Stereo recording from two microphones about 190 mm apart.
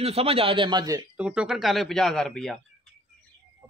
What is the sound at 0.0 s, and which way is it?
A man's voice, 30° right (ahead or behind).